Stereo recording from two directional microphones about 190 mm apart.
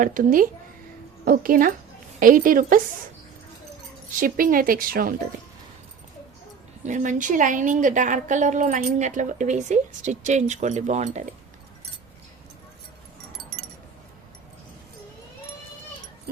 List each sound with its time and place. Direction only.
0.0 s speech: 45° right (ahead or behind)
4.2 s speech: 45° right (ahead or behind)
6.8 s a woman's voice: 40° right (ahead or behind)